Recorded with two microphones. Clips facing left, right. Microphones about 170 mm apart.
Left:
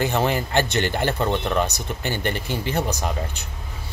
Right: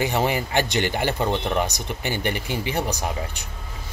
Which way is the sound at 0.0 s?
15° right (ahead or behind).